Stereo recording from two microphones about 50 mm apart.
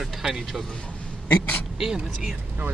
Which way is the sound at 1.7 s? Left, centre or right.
Centre.